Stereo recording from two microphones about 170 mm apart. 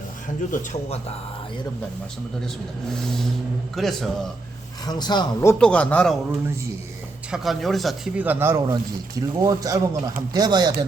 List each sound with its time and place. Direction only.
0.5 s speech: 45° left (ahead or behind)
3.8 s speech: centre (ahead or behind)
4.9 s speech: 25° left (ahead or behind); by 6.1 s 5° left (ahead or behind)
7.3 s speech: centre (ahead or behind); by 10.8 s 25° right (ahead or behind)